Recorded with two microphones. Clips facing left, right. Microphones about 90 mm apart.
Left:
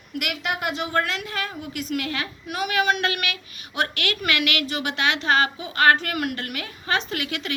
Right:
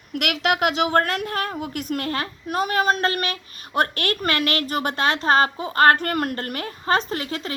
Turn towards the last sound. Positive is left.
turn(degrees=-35)  # may be behind; listen again after turning